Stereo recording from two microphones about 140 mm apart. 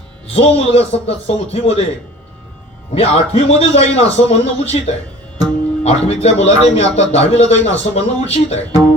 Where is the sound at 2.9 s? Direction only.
45° left (ahead or behind).